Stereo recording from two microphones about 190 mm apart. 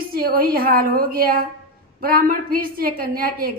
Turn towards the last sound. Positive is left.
turn(degrees=-50)  # may be behind; listen again after turning